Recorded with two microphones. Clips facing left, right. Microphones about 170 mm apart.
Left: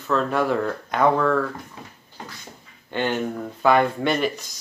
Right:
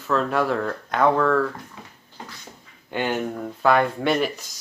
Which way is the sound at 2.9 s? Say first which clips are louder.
Left 1 dB; 5° right (ahead or behind).